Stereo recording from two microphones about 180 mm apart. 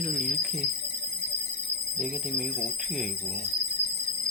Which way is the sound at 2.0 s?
5° right (ahead or behind).